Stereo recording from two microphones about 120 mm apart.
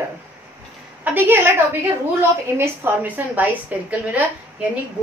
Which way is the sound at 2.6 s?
20° right (ahead or behind).